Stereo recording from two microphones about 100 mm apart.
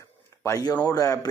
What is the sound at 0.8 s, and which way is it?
Speech, 35° left (ahead or behind).